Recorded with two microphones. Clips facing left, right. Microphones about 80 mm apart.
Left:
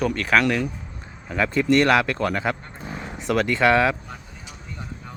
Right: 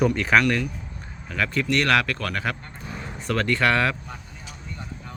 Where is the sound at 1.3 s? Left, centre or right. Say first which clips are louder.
Left 5 dB; left.